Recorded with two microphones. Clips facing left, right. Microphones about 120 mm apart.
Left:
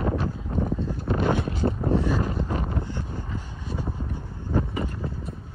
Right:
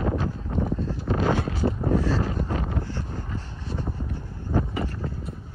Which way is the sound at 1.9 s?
20° left (ahead or behind).